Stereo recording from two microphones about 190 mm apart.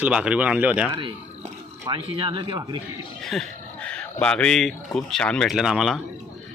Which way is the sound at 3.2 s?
Centre (ahead or behind).